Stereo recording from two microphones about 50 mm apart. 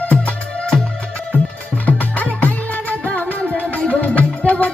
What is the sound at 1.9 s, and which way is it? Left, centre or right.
Music, left.